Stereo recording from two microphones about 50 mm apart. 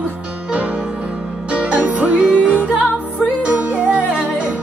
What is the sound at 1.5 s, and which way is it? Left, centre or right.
Music, right.